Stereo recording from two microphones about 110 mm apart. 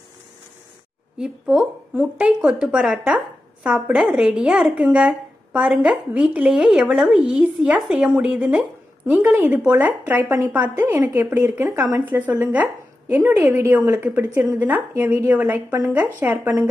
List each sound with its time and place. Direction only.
1.1 s speech: 10° right (ahead or behind)